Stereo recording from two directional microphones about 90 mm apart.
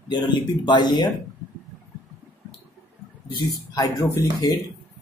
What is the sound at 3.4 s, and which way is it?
Speech, 45° left (ahead or behind).